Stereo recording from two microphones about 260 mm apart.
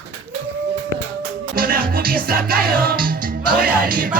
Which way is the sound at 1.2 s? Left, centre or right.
Right.